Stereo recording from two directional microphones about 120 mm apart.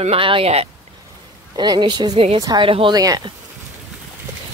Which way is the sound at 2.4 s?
35° right (ahead or behind).